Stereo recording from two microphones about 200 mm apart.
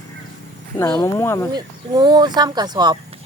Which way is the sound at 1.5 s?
20° right (ahead or behind).